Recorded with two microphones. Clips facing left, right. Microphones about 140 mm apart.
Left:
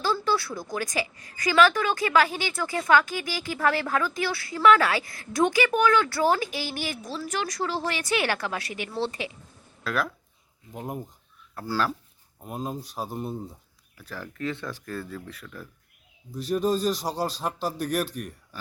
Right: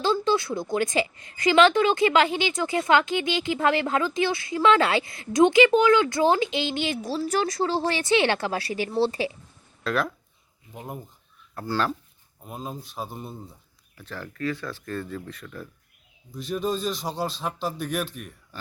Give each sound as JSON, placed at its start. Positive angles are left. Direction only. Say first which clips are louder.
{"t": 0.0, "sound": "a woman's voice", "louder": "right 3 dB", "side_deg": -20}
{"t": 9.8, "sound": "speech", "louder": "right 2 dB", "side_deg": 0}
{"t": 14.8, "sound": "speech", "louder": "right 3 dB", "side_deg": 5}
{"t": 16.6, "sound": "speech", "louder": "left 2 dB", "side_deg": 40}
{"t": 17.4, "sound": "speech", "louder": "even", "side_deg": 10}
{"t": 18.0, "sound": "speech", "louder": "left 2 dB", "side_deg": 40}
{"t": 18.5, "sound": "speech", "louder": "right 2 dB", "side_deg": 5}